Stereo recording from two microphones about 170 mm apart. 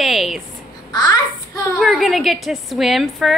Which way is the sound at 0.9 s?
25° left (ahead or behind).